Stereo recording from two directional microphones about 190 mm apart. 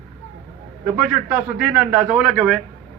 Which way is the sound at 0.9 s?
5° right (ahead or behind).